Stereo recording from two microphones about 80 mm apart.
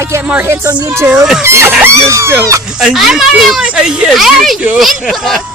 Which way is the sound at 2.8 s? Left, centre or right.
Centre.